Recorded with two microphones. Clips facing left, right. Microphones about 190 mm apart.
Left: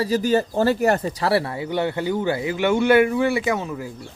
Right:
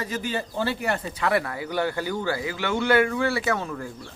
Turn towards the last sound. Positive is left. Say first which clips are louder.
# left 3 dB
turn(degrees=10)  # may be behind; listen again after turning